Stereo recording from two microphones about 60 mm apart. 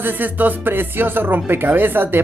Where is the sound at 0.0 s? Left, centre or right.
Right.